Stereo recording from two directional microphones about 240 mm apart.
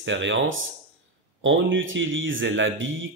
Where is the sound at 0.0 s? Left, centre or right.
Right.